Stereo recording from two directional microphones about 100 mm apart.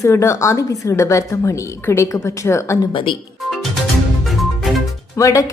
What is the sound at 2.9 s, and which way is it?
Speech, 55° left (ahead or behind).